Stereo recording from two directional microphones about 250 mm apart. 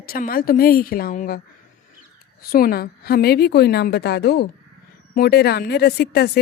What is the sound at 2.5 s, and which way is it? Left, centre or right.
Speech, left.